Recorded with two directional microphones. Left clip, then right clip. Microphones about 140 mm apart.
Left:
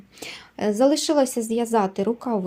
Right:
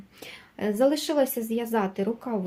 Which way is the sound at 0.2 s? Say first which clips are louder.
Left 5 dB; 45° left (ahead or behind).